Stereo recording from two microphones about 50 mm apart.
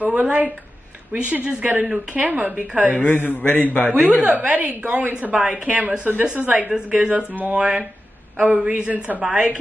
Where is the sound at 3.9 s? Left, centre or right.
Right.